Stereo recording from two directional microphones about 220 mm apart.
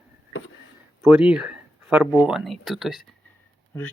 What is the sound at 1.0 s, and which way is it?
Speech, 5° right (ahead or behind).